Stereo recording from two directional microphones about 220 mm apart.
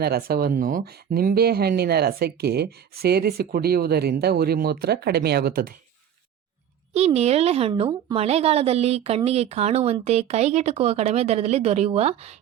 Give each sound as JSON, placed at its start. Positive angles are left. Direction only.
{"t": 0.0, "sound": "speech", "side_deg": -45}
{"t": 6.9, "sound": "a woman's voice", "side_deg": -30}